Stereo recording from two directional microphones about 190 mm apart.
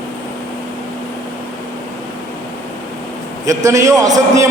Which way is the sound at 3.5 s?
15° right (ahead or behind).